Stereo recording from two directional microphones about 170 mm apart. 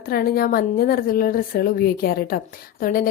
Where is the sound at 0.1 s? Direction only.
60° left (ahead or behind).